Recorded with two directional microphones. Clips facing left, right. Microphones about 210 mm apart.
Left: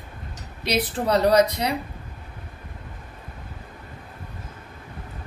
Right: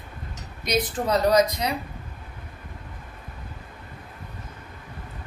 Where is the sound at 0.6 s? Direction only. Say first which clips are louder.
Left 1 dB; 35° left (ahead or behind).